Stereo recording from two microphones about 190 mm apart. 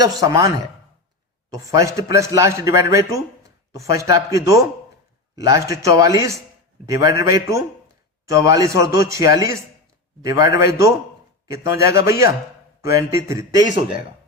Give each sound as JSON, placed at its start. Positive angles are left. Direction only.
{"t": 0.0, "sound": "a woman's voice", "side_deg": -20}
{"t": 1.6, "sound": "speech", "side_deg": -15}